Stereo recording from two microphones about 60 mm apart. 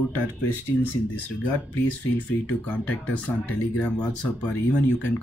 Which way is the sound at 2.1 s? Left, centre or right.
Left.